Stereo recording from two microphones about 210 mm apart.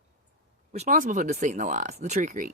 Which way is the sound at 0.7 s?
35° right (ahead or behind).